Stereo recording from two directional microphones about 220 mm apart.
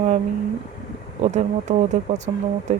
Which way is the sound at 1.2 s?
30° right (ahead or behind).